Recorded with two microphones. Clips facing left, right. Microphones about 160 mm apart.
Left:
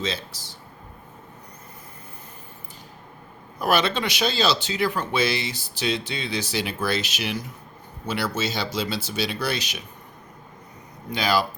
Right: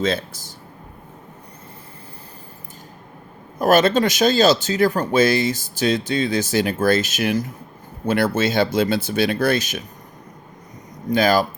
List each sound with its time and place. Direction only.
0.0 s speech: 50° right (ahead or behind)
3.6 s speech: 45° right (ahead or behind)
11.1 s speech: 45° right (ahead or behind)